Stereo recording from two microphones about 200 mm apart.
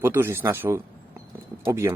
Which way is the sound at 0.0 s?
10° right (ahead or behind).